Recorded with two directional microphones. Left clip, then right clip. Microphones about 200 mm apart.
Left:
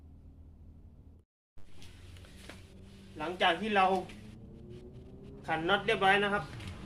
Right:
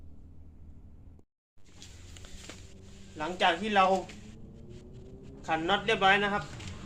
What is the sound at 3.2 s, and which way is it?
Speech, 15° right (ahead or behind).